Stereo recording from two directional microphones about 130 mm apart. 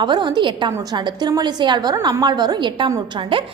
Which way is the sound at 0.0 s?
35° right (ahead or behind).